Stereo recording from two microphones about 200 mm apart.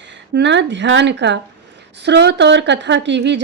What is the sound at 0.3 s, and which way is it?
Speech, 60° right (ahead or behind).